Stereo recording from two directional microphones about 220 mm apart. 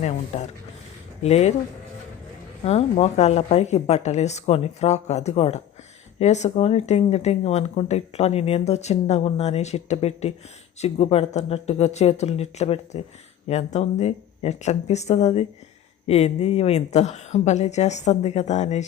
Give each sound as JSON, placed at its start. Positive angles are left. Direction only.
{"t": 0.0, "sound": "a woman's voice", "side_deg": 30}
{"t": 2.6, "sound": "a woman's voice", "side_deg": 30}